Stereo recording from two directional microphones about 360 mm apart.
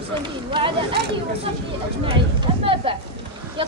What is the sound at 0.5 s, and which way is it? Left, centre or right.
Speech, centre.